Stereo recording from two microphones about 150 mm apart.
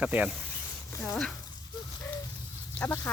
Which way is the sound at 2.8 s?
15° left (ahead or behind).